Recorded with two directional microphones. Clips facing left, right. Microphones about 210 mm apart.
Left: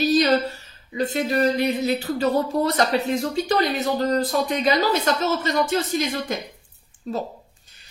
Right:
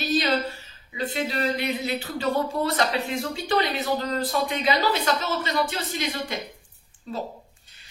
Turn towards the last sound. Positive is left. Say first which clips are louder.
# left 5 dB
turn(degrees=45)  # may be behind; listen again after turning